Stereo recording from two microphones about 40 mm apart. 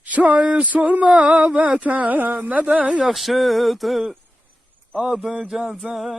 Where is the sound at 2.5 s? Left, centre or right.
Right.